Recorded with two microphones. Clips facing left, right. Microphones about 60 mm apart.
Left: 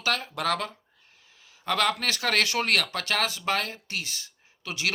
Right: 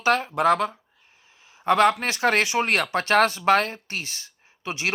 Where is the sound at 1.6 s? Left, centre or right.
Right.